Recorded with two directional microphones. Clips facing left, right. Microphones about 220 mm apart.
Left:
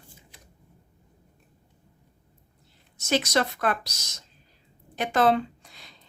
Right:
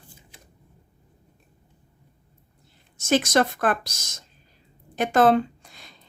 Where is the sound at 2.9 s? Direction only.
50° right (ahead or behind).